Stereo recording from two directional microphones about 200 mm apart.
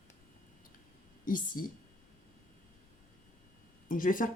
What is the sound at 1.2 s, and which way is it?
Speech, 45° left (ahead or behind).